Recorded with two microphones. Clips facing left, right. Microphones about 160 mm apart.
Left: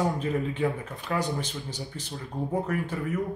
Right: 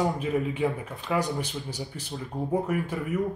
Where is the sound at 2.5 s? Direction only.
10° right (ahead or behind).